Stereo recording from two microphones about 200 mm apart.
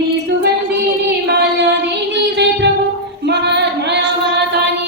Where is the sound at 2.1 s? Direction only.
60° right (ahead or behind).